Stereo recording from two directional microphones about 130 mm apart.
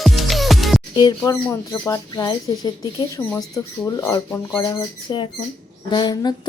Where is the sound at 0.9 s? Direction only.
30° left (ahead or behind).